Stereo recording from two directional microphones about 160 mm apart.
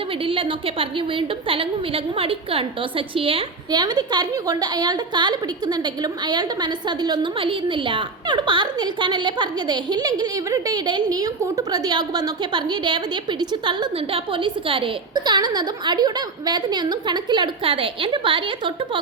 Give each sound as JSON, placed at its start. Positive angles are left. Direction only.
{"t": 0.3, "sound": "a woman's voice", "side_deg": -35}